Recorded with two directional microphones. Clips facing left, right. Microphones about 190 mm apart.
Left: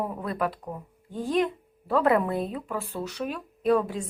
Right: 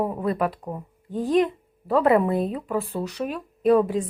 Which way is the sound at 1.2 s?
Centre (ahead or behind).